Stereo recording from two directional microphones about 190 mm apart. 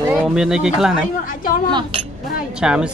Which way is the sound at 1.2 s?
45° left (ahead or behind).